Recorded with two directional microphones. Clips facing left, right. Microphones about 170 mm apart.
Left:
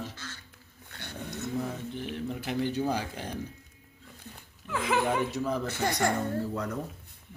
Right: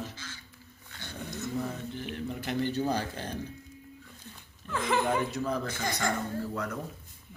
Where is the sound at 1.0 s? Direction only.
60° left (ahead or behind).